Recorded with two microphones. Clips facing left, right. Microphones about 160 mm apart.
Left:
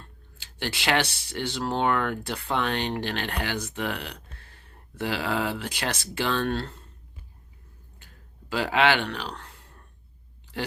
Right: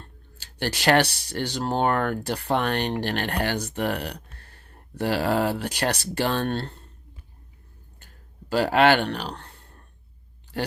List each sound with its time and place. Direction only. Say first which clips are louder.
0.6 s speech: right 5 dB; 40° right (ahead or behind)
6.6 s speech: right 1 dB; 35° right (ahead or behind)
8.4 s speech: right 4 dB; 40° right (ahead or behind)
9.0 s speech: right 3 dB; 35° right (ahead or behind)